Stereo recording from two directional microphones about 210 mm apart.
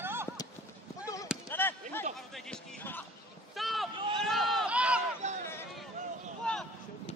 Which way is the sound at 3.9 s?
25° right (ahead or behind).